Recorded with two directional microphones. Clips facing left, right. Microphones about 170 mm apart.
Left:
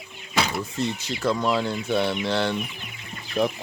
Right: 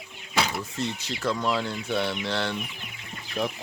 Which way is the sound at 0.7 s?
15° left (ahead or behind).